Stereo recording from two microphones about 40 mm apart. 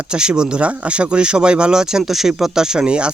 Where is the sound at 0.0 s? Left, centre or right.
Right.